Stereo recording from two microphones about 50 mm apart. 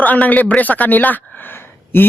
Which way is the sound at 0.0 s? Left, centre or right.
Left.